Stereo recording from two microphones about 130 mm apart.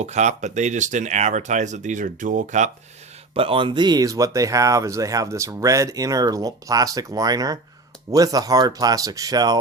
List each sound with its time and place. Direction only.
0.0 s speech: 60° right (ahead or behind)
3.3 s speech: 45° right (ahead or behind); by 9.6 s 30° right (ahead or behind)